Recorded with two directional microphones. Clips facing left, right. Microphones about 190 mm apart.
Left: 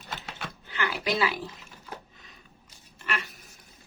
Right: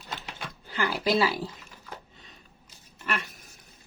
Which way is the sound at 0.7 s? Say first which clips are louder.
Right 4 dB; 40° right (ahead or behind).